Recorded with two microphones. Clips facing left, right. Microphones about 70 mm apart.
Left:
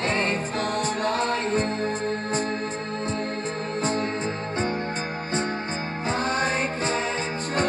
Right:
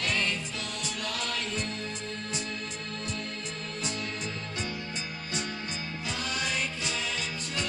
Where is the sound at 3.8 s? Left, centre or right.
Left.